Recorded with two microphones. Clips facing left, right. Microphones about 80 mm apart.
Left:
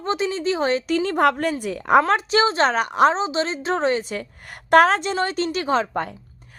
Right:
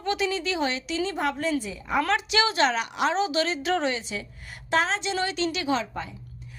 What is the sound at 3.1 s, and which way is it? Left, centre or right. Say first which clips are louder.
A woman's voice: left 2 dB; left.